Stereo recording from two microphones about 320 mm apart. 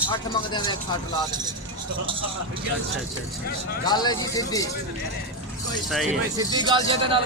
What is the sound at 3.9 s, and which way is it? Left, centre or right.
Speech, centre.